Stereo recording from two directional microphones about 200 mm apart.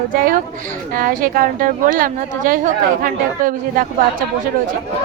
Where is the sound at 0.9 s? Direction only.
45° right (ahead or behind).